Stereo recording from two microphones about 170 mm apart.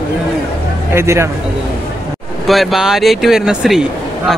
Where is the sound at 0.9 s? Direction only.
15° right (ahead or behind).